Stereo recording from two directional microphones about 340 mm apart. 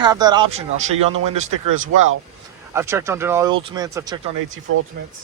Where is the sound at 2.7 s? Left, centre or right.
Centre.